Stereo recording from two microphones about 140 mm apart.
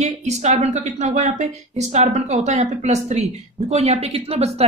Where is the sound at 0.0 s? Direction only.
55° right (ahead or behind).